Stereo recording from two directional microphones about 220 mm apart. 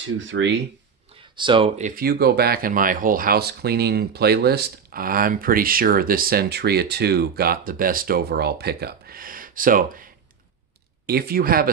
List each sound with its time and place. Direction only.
0.2 s speech: 60° right (ahead or behind)
1.3 s speech: 20° right (ahead or behind)
1.8 s speech: 40° right (ahead or behind)
11.1 s speech: 45° right (ahead or behind)